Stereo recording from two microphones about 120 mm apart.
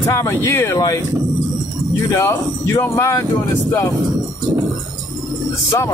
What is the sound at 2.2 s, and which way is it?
Speech, 25° left (ahead or behind).